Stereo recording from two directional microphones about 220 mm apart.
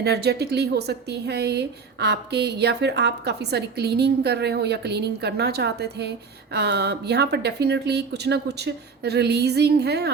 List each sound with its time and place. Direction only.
0.0 s a woman's voice: 50° right (ahead or behind)